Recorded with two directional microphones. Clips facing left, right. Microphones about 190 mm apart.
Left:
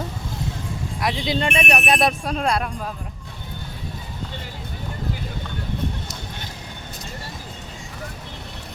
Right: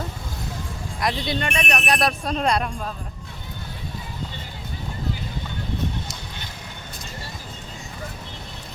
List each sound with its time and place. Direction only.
0.9 s speech: 10° left (ahead or behind)
2.2 s speech: 5° left (ahead or behind)